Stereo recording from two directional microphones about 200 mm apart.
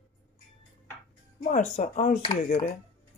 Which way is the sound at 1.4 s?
40° left (ahead or behind).